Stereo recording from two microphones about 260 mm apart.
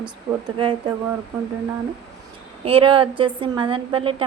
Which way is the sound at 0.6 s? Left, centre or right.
Centre.